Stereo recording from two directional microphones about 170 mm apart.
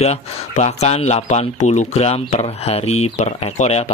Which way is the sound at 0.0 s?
40° left (ahead or behind).